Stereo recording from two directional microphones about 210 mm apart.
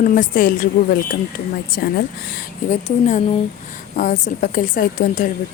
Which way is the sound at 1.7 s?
50° left (ahead or behind).